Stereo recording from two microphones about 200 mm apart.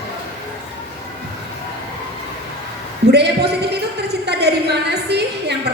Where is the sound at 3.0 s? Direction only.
55° right (ahead or behind).